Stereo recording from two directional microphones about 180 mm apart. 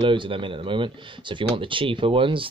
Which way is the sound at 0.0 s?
30° right (ahead or behind).